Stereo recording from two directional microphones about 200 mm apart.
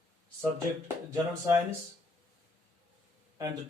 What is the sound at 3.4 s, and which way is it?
Speech, 20° right (ahead or behind).